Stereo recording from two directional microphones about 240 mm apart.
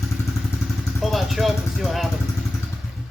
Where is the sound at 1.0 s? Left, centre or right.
Centre.